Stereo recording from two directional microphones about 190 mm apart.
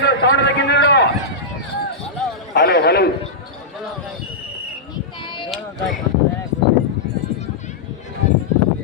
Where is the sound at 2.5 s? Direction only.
60° left (ahead or behind).